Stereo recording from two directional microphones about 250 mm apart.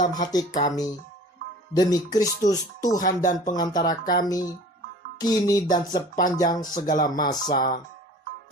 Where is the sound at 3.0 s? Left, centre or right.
Left.